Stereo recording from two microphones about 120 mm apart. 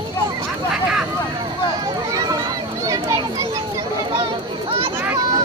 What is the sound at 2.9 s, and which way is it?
Children playing, 25° right (ahead or behind).